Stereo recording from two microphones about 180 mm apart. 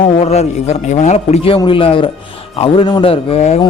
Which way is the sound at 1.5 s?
30° left (ahead or behind).